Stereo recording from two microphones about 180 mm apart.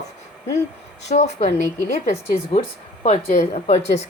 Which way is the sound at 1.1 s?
40° left (ahead or behind).